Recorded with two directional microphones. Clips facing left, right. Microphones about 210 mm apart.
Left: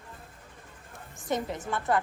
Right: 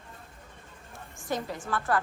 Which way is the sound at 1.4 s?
20° left (ahead or behind).